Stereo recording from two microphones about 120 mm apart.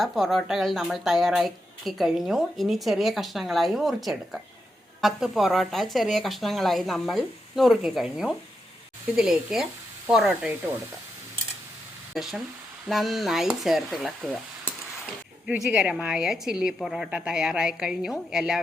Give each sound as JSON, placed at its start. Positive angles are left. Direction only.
{"t": 0.0, "sound": "speech", "side_deg": 0}
{"t": 12.1, "sound": "speech", "side_deg": -5}
{"t": 15.4, "sound": "speech", "side_deg": -5}